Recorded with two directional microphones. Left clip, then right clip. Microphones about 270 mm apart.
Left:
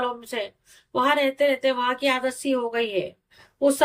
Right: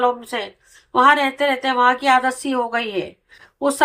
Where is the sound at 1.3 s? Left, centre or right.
Centre.